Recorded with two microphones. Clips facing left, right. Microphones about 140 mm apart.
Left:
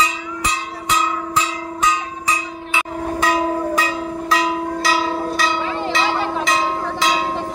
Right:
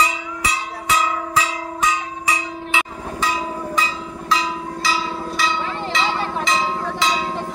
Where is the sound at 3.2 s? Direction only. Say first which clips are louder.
Left 5 dB; 55° left (ahead or behind).